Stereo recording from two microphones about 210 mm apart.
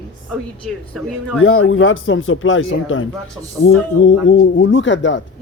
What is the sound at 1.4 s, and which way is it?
Speech, 80° left.